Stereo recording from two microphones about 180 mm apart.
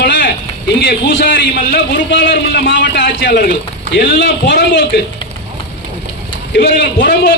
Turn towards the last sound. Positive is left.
turn(degrees=65)  # may be behind; listen again after turning